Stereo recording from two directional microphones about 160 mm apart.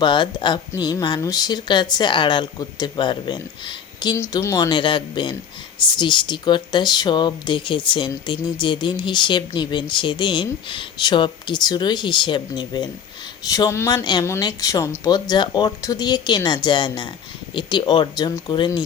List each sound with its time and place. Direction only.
0.0 s speech: 30° left (ahead or behind)